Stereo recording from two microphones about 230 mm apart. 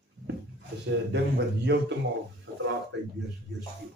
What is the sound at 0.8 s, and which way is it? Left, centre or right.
Speech, right.